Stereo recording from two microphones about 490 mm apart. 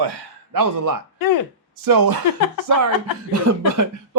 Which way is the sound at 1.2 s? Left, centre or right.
Left.